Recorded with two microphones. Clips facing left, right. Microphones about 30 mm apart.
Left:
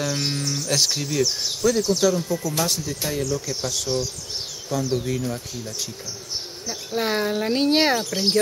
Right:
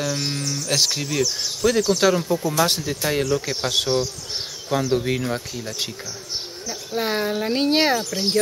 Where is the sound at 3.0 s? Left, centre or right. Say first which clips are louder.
Right 5 dB; right.